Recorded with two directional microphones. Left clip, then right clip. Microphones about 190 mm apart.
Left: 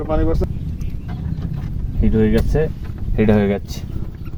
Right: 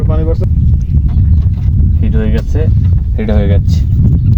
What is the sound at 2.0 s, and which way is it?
Speech, 10° left (ahead or behind).